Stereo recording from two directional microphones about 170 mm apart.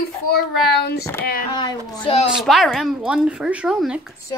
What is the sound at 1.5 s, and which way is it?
Speech, 25° left (ahead or behind).